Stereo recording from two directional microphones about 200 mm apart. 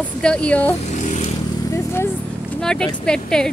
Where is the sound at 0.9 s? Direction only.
35° left (ahead or behind).